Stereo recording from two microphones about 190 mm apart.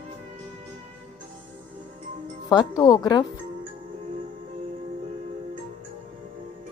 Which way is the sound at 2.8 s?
20° left (ahead or behind).